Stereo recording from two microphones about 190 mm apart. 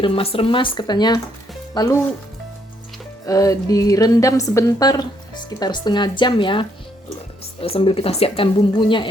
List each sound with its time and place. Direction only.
0.0 s a woman's voice: 30° left (ahead or behind)
3.2 s a woman's voice: 20° left (ahead or behind)